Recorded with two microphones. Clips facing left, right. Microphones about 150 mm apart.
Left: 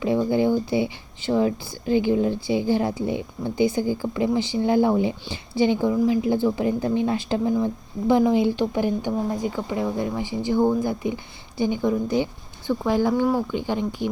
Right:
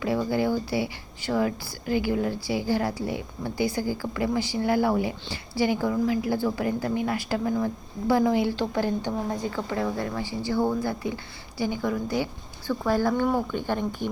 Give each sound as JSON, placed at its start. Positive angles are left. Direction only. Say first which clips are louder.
{"t": 0.0, "sound": "a woman's voice", "louder": "left 4 dB", "side_deg": 20}